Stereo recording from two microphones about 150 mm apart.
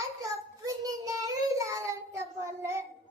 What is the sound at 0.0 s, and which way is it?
Child singing, 20° right (ahead or behind).